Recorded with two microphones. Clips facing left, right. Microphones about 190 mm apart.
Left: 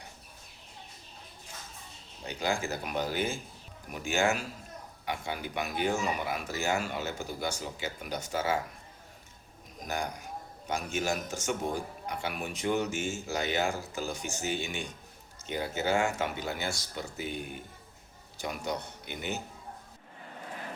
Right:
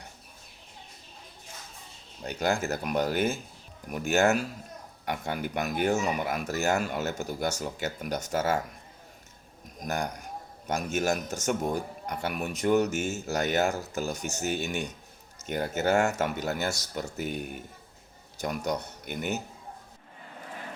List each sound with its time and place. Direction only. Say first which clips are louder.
2.2 s speech: right 4 dB; 45° right (ahead or behind)
3.9 s speech: right 6 dB; 60° right (ahead or behind)
4.2 s speech: right 4 dB; 45° right (ahead or behind)
9.8 s speech: right 3 dB; 45° right (ahead or behind)